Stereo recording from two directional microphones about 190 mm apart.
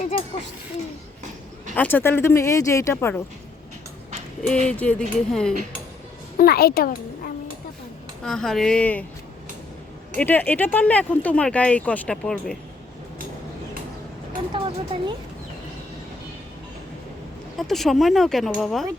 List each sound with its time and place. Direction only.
0.0 s speech: 30° left (ahead or behind)
1.7 s speech: 10° left (ahead or behind)
4.6 s speech: 5° left (ahead or behind)
6.3 s a child's voice: 55° left (ahead or behind)
8.2 s speech: centre (ahead or behind)
10.2 s speech: 10° left (ahead or behind)
14.5 s speech: 25° right (ahead or behind)
17.6 s speech: centre (ahead or behind)